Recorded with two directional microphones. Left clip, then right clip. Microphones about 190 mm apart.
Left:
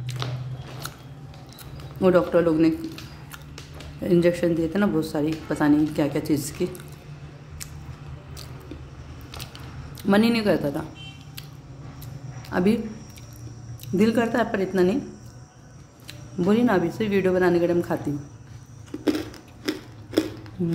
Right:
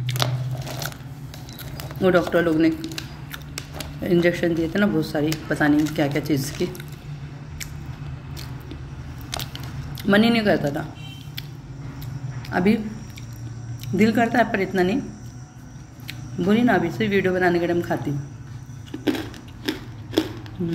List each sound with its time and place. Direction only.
0.2 s biting: 75° right (ahead or behind)
2.0 s speech: 25° left (ahead or behind)
4.0 s speech: 30° left (ahead or behind)
10.0 s speech: 30° left (ahead or behind)
12.4 s speech: 30° left (ahead or behind)
13.9 s speech: 35° left (ahead or behind)
16.4 s speech: 30° left (ahead or behind)
19.0 s a sound: 40° left (ahead or behind)